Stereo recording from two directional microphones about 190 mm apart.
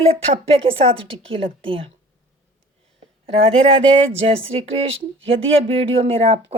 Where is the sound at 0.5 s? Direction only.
30° right (ahead or behind).